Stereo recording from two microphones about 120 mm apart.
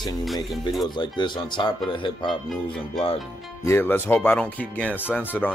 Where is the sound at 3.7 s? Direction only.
20° left (ahead or behind).